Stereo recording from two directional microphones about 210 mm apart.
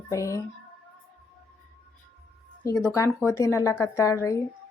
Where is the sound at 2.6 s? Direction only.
15° left (ahead or behind).